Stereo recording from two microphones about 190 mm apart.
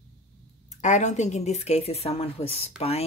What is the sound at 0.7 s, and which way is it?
Speech, 40° left (ahead or behind).